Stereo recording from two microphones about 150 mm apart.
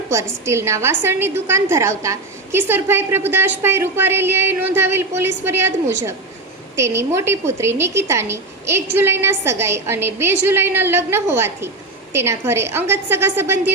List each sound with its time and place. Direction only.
0.1 s a woman's voice: 20° right (ahead or behind)